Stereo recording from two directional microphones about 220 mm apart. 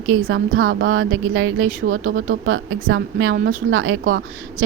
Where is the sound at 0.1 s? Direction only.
65° right (ahead or behind).